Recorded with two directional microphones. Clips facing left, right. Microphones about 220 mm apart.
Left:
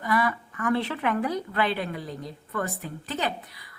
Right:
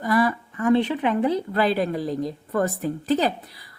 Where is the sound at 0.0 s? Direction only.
35° right (ahead or behind).